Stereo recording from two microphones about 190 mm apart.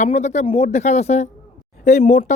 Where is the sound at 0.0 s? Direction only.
35° left (ahead or behind).